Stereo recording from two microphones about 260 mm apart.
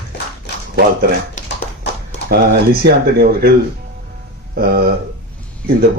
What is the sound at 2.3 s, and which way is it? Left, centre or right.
A man's voice, right.